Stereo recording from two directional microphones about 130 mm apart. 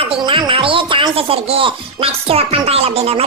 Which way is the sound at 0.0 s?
45° right (ahead or behind).